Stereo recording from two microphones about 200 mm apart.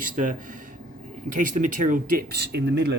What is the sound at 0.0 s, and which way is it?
Speech, 40° right (ahead or behind).